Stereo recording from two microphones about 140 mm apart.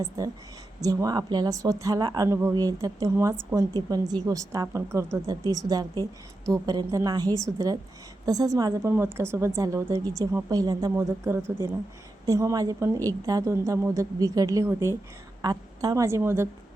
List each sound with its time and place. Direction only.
0.8 s a woman's voice: 25° right (ahead or behind)